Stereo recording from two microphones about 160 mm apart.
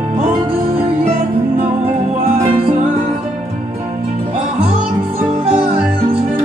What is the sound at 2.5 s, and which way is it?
Music, 35° right (ahead or behind).